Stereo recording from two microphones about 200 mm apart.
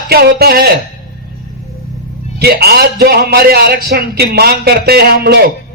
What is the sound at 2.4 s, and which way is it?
A man's voice, 50° right (ahead or behind).